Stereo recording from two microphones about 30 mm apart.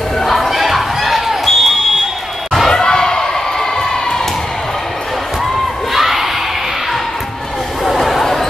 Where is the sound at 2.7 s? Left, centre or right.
Left.